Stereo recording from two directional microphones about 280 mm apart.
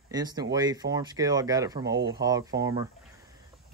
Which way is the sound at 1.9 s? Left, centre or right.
Right.